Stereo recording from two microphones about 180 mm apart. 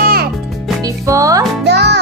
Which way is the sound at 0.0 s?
55° right (ahead or behind).